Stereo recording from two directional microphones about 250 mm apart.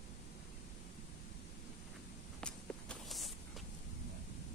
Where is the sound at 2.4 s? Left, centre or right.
Centre.